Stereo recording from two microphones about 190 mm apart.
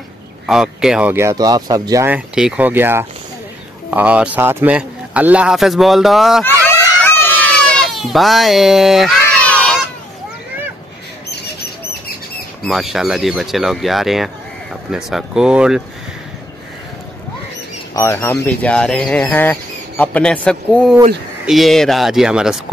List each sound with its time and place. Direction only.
0.5 s a man's voice: 5° right (ahead or behind)
7.0 s baby cry: 5° left (ahead or behind)
11.2 s a sound: 55° left (ahead or behind)
12.6 s a man's voice: centre (ahead or behind)
17.9 s a man's voice: 15° left (ahead or behind); by 22.6 s 5° right (ahead or behind)